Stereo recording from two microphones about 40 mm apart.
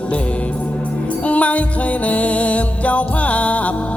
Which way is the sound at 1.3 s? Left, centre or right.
Left.